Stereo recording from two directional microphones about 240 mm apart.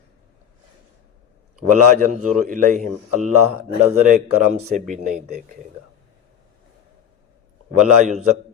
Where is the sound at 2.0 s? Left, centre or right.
Right.